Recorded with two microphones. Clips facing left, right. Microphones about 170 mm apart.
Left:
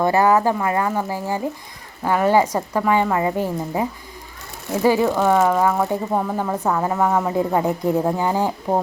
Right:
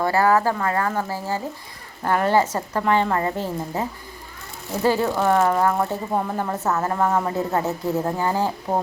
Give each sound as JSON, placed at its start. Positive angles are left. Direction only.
{"t": 0.0, "sound": "a woman's voice", "side_deg": 20}